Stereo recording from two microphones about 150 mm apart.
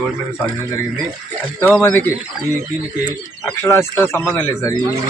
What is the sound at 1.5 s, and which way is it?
Speech, 15° left (ahead or behind).